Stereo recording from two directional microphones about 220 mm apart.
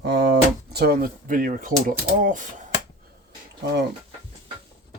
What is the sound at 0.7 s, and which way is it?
Speech, 45° right (ahead or behind).